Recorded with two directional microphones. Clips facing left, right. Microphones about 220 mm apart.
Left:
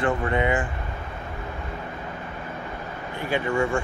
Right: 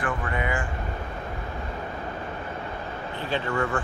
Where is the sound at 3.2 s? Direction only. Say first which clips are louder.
Left 3 dB; 15° left (ahead or behind).